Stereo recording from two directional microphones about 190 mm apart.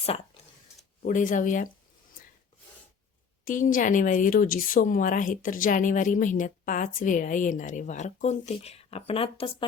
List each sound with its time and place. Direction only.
1.0 s speech: 45° left (ahead or behind)
3.4 s speech: 45° left (ahead or behind); by 9.6 s 30° left (ahead or behind)